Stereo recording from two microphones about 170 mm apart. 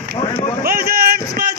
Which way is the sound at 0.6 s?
60° right (ahead or behind).